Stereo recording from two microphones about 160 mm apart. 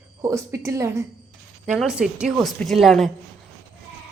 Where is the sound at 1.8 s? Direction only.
5° right (ahead or behind).